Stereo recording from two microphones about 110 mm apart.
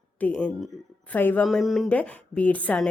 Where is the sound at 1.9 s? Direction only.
10° left (ahead or behind).